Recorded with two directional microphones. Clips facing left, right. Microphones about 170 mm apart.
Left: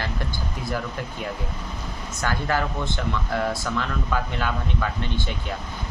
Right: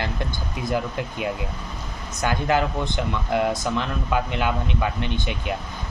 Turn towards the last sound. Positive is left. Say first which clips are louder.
# right 2 dB
turn(degrees=-15)  # may be behind; listen again after turning